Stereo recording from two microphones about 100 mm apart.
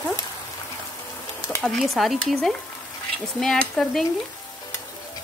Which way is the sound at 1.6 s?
Centre (ahead or behind).